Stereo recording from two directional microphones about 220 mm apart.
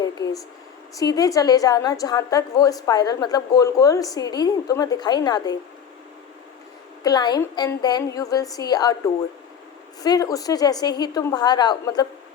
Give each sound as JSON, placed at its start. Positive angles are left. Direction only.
{"t": 0.0, "sound": "a sound", "side_deg": 15}
{"t": 0.9, "sound": "a woman's voice", "side_deg": 15}
{"t": 7.0, "sound": "a woman's voice", "side_deg": 15}
{"t": 10.0, "sound": "a woman's voice", "side_deg": 15}